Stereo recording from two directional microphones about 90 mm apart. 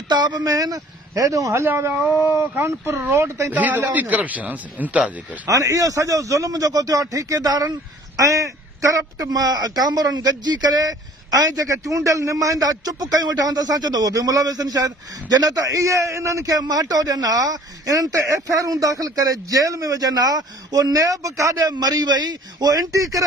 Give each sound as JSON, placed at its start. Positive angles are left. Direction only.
{"t": 0.1, "sound": "a man's voice", "side_deg": -50}
{"t": 1.6, "sound": "speech", "side_deg": -25}
{"t": 3.5, "sound": "speech", "side_deg": -20}
{"t": 5.5, "sound": "a man's voice", "side_deg": -35}